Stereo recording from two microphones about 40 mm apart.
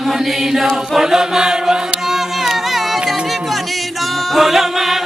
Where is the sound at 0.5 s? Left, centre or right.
Centre.